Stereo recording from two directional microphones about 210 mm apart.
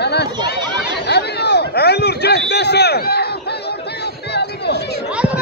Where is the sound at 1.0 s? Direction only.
50° left (ahead or behind).